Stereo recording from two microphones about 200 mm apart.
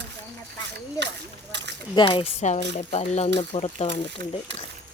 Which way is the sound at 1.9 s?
25° left (ahead or behind).